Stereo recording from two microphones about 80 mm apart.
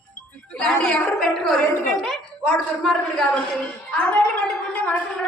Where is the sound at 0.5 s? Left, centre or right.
Centre.